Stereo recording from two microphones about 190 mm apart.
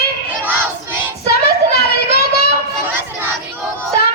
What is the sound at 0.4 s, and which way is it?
Crowd, 10° right (ahead or behind).